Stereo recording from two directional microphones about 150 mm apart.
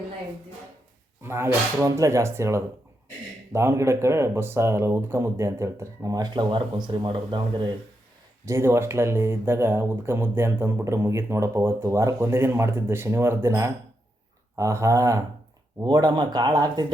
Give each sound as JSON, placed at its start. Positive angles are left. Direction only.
{"t": 1.2, "sound": "speech", "side_deg": -15}
{"t": 8.4, "sound": "speech", "side_deg": -20}